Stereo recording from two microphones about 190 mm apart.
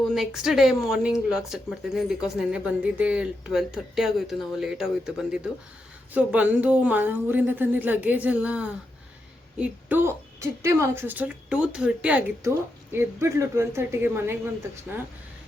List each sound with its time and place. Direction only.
0.1 s a woman's voice: centre (ahead or behind)